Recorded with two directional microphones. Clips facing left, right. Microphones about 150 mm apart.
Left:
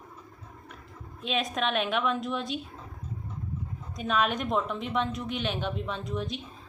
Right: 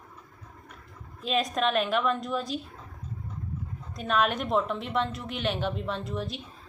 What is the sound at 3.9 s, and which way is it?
Speech, centre (ahead or behind).